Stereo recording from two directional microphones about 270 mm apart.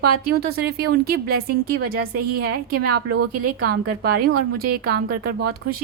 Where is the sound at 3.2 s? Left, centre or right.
Right.